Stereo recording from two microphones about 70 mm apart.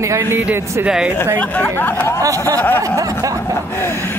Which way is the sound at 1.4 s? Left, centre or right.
Left.